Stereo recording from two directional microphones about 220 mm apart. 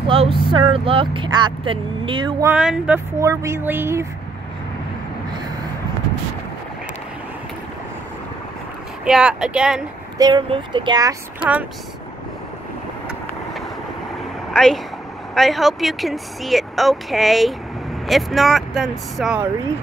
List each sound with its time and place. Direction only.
0.1 s speech: 25° right (ahead or behind)
2.5 s speech: 5° right (ahead or behind)
9.0 s speech: 5° right (ahead or behind)
10.1 s speech: 20° right (ahead or behind)
11.3 s speech: 5° right (ahead or behind)
14.5 s a sound: 5° left (ahead or behind)
15.3 s speech: centre (ahead or behind)